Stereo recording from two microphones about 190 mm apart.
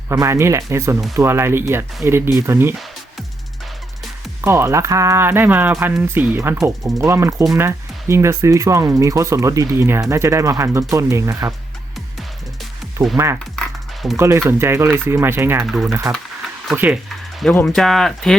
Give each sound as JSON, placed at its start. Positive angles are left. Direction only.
{"t": 0.1, "sound": "speech", "side_deg": -15}
{"t": 4.4, "sound": "speech", "side_deg": -15}
{"t": 13.1, "sound": "speech", "side_deg": -15}
{"t": 13.4, "sound": "music", "side_deg": 0}
{"t": 14.2, "sound": "speech", "side_deg": -15}
{"t": 15.6, "sound": "speech", "side_deg": 0}
{"t": 15.9, "sound": "speech", "side_deg": -15}
{"t": 17.4, "sound": "speech", "side_deg": 5}